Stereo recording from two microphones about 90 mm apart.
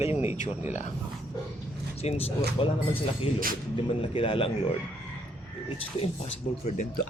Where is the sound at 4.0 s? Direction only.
85° left.